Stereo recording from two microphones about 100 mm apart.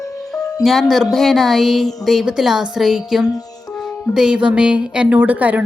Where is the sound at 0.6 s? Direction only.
Centre (ahead or behind).